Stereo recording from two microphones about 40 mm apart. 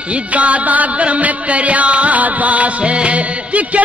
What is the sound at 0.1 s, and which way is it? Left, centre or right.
Music, right.